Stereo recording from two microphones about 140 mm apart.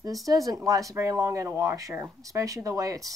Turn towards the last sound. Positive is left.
turn(degrees=-25)  # may be behind; listen again after turning